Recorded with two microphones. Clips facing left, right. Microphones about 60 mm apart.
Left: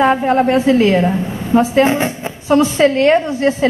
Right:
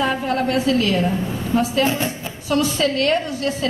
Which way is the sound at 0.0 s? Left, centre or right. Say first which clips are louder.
Left 8 dB; left.